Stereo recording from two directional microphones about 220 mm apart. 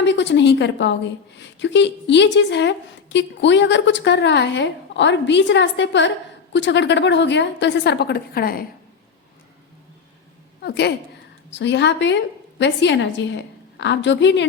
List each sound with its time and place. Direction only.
0.0 s a woman's voice: 55° left (ahead or behind)
10.6 s a woman's voice: 50° left (ahead or behind)